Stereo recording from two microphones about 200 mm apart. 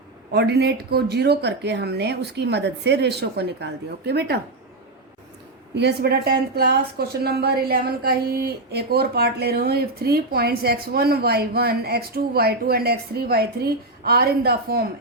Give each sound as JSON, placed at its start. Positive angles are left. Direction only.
{"t": 0.3, "sound": "speech", "side_deg": -55}
{"t": 5.7, "sound": "a woman's voice", "side_deg": -55}